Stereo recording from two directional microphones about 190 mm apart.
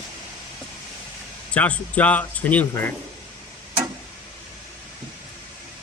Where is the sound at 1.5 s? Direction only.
5° left (ahead or behind).